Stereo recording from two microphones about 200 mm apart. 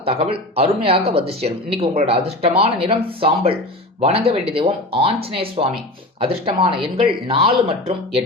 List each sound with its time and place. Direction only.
0.0 s speech: 30° right (ahead or behind)